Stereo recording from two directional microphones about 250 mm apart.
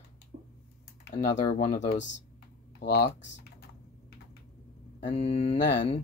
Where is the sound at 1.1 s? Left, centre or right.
Left.